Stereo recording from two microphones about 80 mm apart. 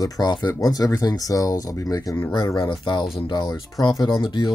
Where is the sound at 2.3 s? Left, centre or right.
Left.